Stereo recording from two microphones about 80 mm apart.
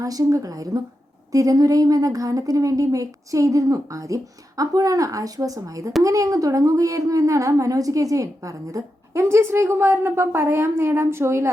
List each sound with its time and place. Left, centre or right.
0.0 s a woman's voice: right